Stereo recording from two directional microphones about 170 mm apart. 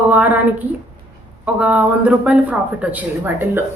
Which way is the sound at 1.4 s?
10° right (ahead or behind).